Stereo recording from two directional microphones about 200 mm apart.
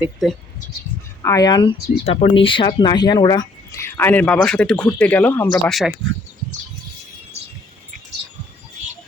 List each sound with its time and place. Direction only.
0.0 s speech: centre (ahead or behind)
1.2 s speech: 15° left (ahead or behind); by 5.9 s centre (ahead or behind)